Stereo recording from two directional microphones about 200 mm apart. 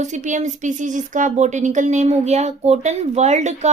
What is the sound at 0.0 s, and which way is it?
Speech, 35° right (ahead or behind).